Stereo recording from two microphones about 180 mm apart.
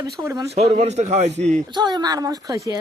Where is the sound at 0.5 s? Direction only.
35° right (ahead or behind).